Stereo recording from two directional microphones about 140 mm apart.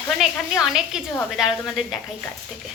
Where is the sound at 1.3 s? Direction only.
5° right (ahead or behind).